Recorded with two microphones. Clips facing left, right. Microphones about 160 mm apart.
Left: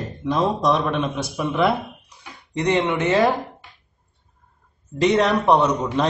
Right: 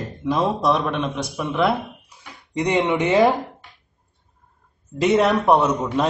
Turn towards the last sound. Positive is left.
turn(degrees=-5)  # may be behind; listen again after turning